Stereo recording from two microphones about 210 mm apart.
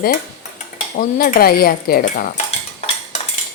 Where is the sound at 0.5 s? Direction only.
40° left (ahead or behind).